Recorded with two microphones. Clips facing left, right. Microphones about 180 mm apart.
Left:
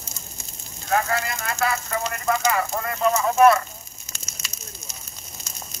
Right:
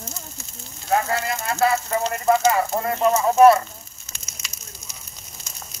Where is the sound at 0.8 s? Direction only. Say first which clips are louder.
Right 2 dB; 25° right (ahead or behind).